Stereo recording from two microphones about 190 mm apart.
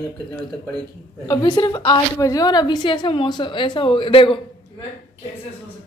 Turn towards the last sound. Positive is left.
turn(degrees=25)  # may be behind; listen again after turning